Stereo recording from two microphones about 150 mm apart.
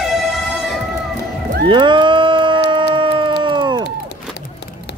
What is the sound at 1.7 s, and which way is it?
Howl, 30° right (ahead or behind).